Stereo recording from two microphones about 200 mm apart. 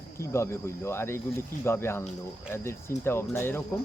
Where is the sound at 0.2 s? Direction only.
15° left (ahead or behind).